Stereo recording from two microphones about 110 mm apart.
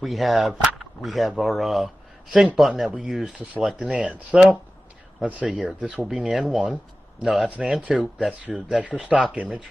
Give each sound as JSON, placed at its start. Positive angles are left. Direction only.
{"t": 0.0, "sound": "speech", "side_deg": 0}